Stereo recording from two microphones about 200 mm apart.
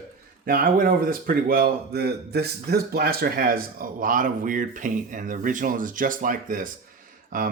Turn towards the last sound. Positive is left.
turn(degrees=-40)  # may be behind; listen again after turning